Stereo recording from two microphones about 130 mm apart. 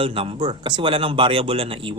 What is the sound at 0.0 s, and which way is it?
Speech, 45° right (ahead or behind).